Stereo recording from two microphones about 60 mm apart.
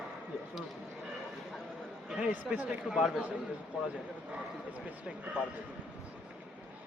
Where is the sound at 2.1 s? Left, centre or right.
Centre.